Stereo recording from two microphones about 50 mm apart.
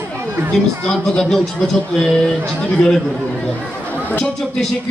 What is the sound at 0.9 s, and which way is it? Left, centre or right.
Speech, centre.